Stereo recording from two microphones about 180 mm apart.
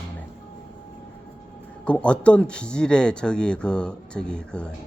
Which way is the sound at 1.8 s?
5° left (ahead or behind).